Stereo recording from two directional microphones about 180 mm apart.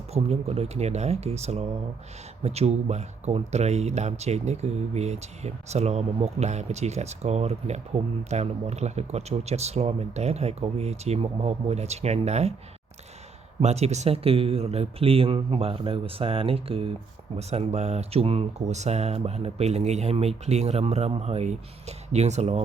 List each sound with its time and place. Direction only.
0.1 s speech: 35° right (ahead or behind)
13.6 s speech: 35° right (ahead or behind)